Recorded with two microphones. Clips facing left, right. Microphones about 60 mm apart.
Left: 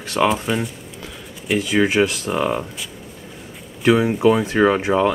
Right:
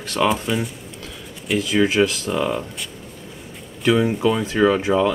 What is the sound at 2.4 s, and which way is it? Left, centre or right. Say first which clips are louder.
Speech: left 2 dB; centre.